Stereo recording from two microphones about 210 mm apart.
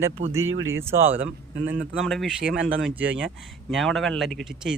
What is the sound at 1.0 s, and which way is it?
Speech, 10° right (ahead or behind).